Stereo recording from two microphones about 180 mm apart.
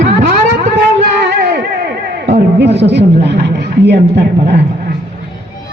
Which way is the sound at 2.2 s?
70° right (ahead or behind).